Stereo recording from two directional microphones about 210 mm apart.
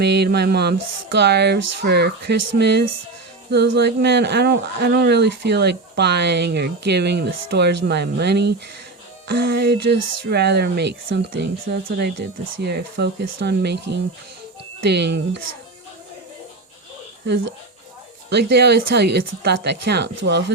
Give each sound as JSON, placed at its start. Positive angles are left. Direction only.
{"t": 0.0, "sound": "speech", "side_deg": -55}
{"t": 18.3, "sound": "speech", "side_deg": -50}